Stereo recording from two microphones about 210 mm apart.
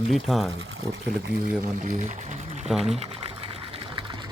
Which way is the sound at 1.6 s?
35° right (ahead or behind).